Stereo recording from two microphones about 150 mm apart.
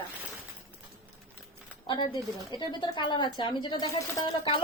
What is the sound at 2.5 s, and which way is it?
Speech, 30° left (ahead or behind).